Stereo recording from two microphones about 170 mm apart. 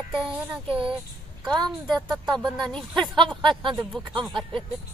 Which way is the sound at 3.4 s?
30° right (ahead or behind).